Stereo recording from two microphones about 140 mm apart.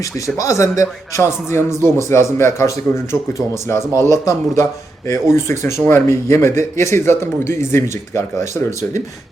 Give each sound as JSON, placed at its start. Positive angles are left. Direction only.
{"t": 0.3, "sound": "a man's voice", "side_deg": 20}